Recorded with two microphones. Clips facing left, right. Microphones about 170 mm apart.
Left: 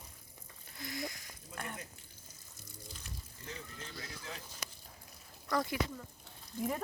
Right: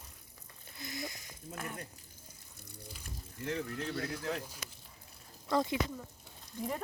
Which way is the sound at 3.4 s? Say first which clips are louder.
Right 12 dB; 65° right (ahead or behind).